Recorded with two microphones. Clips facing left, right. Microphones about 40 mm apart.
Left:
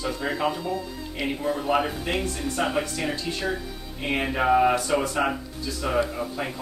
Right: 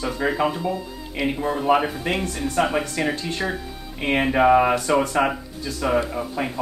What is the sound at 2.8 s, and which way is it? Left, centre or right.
Speech, right.